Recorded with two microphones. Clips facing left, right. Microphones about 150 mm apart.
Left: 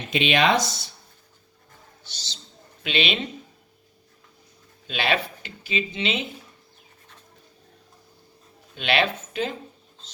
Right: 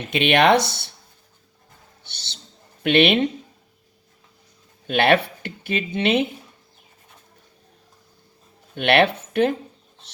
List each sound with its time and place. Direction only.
0.1 s speech: 60° right (ahead or behind)
2.0 s speech: 60° right (ahead or behind)
4.9 s speech: 60° right (ahead or behind)
8.7 s speech: 60° right (ahead or behind)